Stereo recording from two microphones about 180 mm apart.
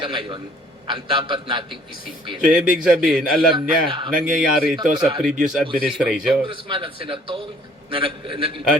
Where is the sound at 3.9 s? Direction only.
25° right (ahead or behind).